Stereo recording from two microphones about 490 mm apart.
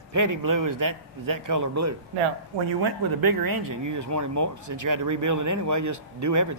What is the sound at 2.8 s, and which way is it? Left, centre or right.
Speech, right.